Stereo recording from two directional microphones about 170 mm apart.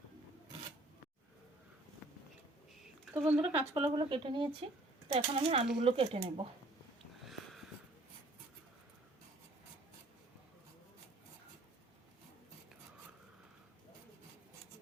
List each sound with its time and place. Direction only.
2.8 s speech: 5° right (ahead or behind)
3.8 s speech: 30° right (ahead or behind)